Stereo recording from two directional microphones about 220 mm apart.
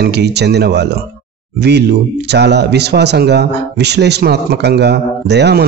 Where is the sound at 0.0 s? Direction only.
50° right (ahead or behind).